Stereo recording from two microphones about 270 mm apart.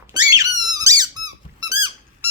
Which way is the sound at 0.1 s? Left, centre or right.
Centre.